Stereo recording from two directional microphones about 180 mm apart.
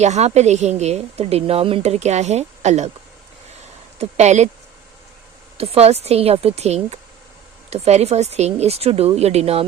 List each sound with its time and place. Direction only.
0.0 s a woman's voice: 40° right (ahead or behind)
3.9 s a woman's voice: 40° right (ahead or behind)
5.5 s a woman's voice: 35° right (ahead or behind)